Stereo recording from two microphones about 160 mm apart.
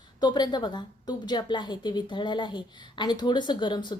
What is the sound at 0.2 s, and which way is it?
A woman's voice, 25° left (ahead or behind).